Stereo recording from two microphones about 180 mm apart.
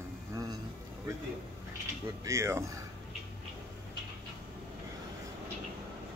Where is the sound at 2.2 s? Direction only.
15° right (ahead or behind).